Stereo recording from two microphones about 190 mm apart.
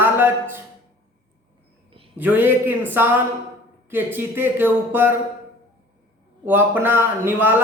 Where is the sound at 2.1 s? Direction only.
10° right (ahead or behind).